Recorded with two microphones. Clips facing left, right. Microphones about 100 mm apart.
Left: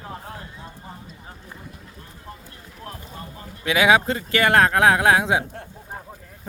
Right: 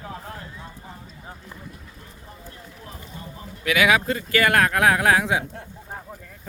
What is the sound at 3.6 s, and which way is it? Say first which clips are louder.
Speech: left 2 dB; 25° left (ahead or behind).